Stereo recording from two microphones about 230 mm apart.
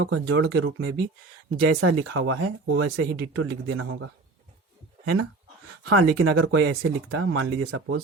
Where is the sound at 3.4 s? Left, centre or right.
Right.